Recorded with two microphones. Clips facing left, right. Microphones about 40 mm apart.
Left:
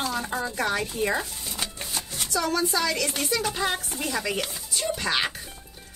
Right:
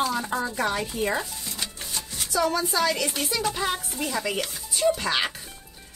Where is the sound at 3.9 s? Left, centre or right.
Centre.